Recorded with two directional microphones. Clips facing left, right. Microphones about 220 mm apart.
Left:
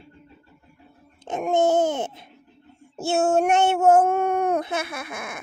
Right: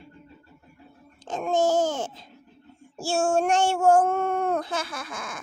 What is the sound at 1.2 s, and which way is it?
A child's voice, 20° left (ahead or behind).